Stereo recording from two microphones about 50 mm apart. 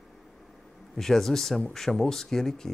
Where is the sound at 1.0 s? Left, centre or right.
Centre.